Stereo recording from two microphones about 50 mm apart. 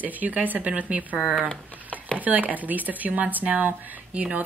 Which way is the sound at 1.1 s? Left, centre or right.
Centre.